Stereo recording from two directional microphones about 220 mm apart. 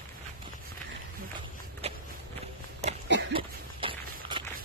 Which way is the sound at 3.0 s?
55° right (ahead or behind).